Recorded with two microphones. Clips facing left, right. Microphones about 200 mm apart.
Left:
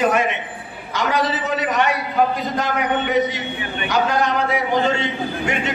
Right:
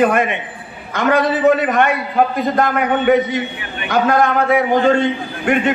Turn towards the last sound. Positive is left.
turn(degrees=-55)  # may be behind; listen again after turning